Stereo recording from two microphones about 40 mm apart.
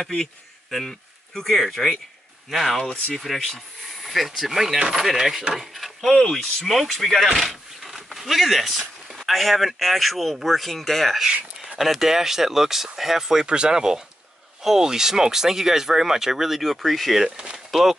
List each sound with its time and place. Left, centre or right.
0.7 s speech: centre
5.8 s door: centre
6.3 s speech: centre
13.5 s speech: right; by 17.2 s centre
17.2 s speech: centre
17.6 s speech: centre